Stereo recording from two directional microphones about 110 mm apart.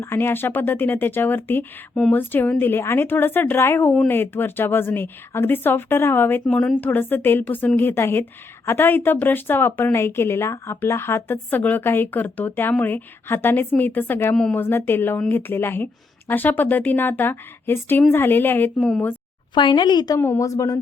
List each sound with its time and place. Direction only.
0.0 s speech: 20° left (ahead or behind)
18.8 s a woman's voice: 5° left (ahead or behind)
19.5 s speech: 45° left (ahead or behind)
20.1 s speech: 25° left (ahead or behind)